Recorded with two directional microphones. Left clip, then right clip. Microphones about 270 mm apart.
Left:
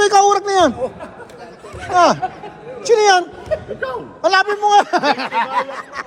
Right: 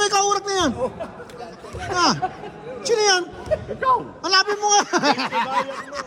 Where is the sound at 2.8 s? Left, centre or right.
Centre.